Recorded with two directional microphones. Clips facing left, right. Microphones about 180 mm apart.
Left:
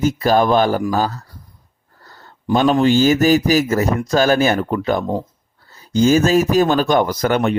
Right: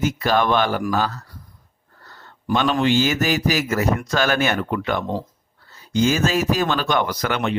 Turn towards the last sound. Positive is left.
turn(degrees=45)  # may be behind; listen again after turning